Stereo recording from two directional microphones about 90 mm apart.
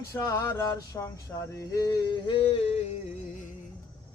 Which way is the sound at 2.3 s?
85° left.